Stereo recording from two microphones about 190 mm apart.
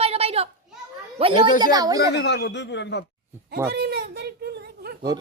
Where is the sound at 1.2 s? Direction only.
30° right (ahead or behind).